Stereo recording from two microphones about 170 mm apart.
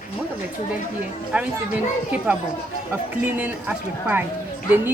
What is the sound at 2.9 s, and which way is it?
Speech, 10° right (ahead or behind).